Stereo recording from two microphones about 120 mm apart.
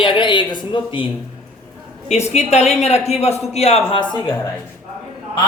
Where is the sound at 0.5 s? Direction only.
40° left (ahead or behind).